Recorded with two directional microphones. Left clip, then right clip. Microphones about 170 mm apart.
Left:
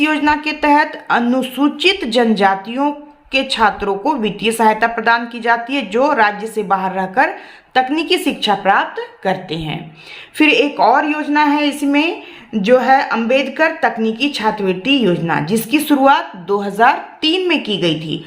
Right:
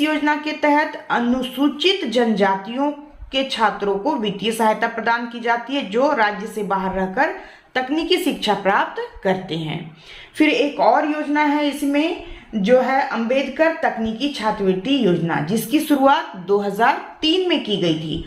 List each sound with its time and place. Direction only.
0.0 s a woman's voice: 35° left (ahead or behind)
10.3 s a woman's voice: 35° left (ahead or behind)